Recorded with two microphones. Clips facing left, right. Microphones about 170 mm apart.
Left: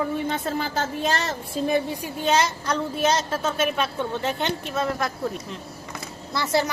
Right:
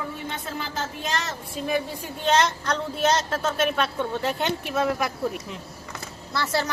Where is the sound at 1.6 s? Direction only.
30° left (ahead or behind).